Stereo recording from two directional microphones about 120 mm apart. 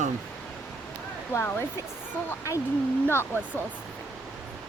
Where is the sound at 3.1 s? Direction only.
20° left (ahead or behind).